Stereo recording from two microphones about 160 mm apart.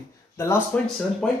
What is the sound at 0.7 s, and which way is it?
Speech, 10° left (ahead or behind).